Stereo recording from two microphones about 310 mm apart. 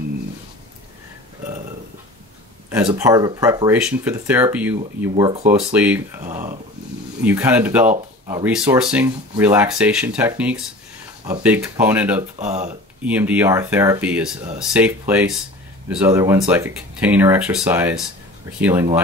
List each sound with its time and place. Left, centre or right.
2.7 s speech: centre
5.7 s speech: centre
12.4 s speech: right
13.0 s speech: centre